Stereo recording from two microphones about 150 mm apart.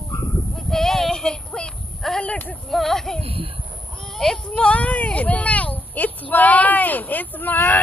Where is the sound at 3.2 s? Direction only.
40° right (ahead or behind).